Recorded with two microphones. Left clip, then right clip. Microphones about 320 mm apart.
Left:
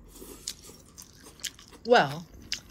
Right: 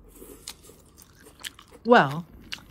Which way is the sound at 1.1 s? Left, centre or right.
Centre.